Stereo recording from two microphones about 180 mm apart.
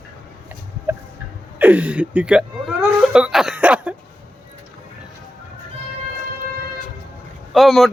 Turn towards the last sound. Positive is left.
turn(degrees=0)  # may be behind; listen again after turning